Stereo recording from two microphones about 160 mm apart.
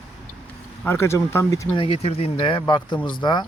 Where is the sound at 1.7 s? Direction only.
35° left (ahead or behind).